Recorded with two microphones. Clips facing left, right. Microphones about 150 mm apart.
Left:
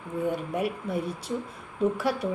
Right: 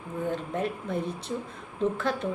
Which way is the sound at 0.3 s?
10° left (ahead or behind).